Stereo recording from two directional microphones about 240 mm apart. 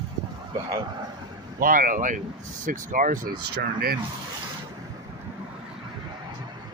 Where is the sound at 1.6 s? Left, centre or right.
Right.